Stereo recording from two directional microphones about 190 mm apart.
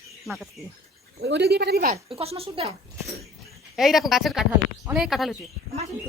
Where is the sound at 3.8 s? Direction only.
Centre (ahead or behind).